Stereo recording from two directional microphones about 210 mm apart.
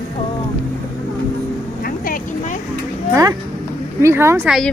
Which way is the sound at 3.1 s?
15° right (ahead or behind).